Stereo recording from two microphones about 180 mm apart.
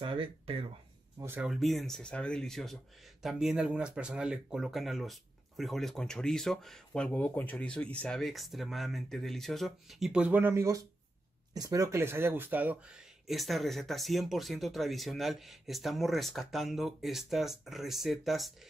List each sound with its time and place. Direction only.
0.0 s a sound: 30° right (ahead or behind)
1.2 s speech: 10° right (ahead or behind)
1.5 s speech: centre (ahead or behind)